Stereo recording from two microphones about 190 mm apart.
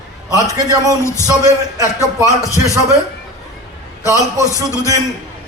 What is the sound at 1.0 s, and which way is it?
A man's voice, 15° left (ahead or behind).